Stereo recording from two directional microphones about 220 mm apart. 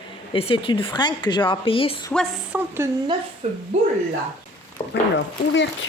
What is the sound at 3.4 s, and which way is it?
Speech, 30° right (ahead or behind).